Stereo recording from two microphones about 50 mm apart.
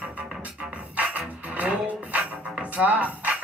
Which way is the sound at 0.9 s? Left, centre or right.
Right.